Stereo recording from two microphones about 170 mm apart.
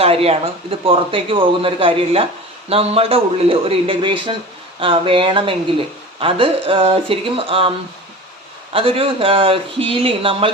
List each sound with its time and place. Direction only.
0.0 s speech: 35° right (ahead or behind)
8.7 s speech: 35° right (ahead or behind)